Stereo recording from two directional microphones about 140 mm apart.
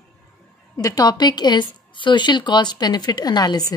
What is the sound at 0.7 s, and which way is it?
Speech, 25° left (ahead or behind).